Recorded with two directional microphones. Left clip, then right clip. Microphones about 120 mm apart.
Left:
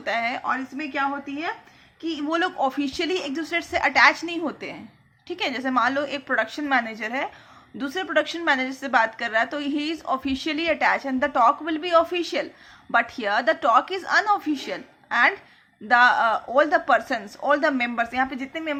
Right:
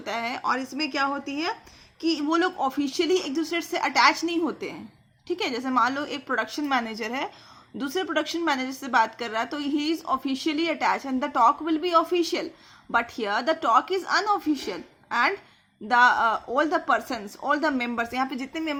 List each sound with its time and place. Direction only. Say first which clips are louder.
0.0 s a woman's voice: left 3 dB; 30° right (ahead or behind)
7.8 s a woman's voice: left 3 dB; 30° right (ahead or behind); by 18.8 s 50° right (ahead or behind)